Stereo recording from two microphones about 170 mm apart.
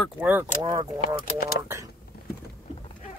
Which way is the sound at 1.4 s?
65° left (ahead or behind).